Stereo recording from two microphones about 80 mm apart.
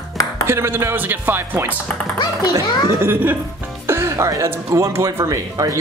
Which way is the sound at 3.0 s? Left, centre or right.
Right.